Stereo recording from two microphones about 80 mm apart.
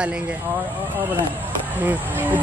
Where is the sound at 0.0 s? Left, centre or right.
Centre.